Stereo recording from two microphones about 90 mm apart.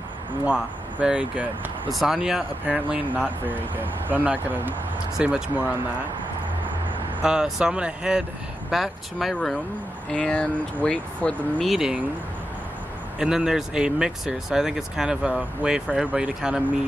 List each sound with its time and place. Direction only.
1.0 s speech: 10° right (ahead or behind)
2.6 s speech: 15° right (ahead or behind)
7.2 s speech: 5° right (ahead or behind)
10.1 s speech: 10° left (ahead or behind)
11.6 s speech: 5° right (ahead or behind)
13.2 s speech: 5° right (ahead or behind)